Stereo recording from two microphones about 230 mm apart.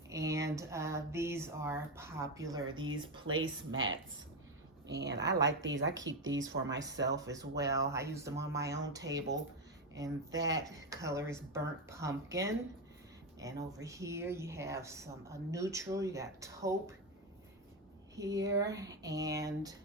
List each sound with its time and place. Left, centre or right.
0.1 s a woman's voice: centre
3.7 s a woman's voice: right
7.2 s a woman's voice: centre
9.9 s a woman's voice: centre
18.2 s a woman's voice: centre